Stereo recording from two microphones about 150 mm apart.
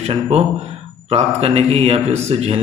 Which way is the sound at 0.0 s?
45° right (ahead or behind).